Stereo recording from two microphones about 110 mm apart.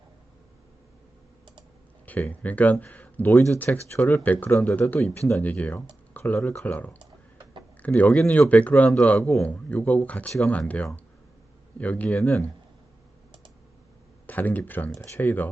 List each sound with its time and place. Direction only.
2.0 s speech: 15° left (ahead or behind)
14.3 s speech: 15° left (ahead or behind)